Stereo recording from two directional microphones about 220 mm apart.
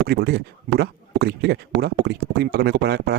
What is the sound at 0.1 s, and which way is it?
A man's voice, 45° right (ahead or behind).